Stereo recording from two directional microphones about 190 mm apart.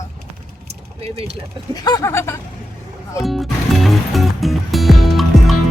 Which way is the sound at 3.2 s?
Centre (ahead or behind).